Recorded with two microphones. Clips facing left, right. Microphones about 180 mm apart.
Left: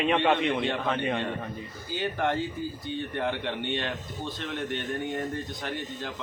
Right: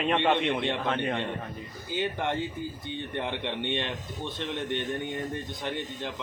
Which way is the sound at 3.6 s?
20° right (ahead or behind).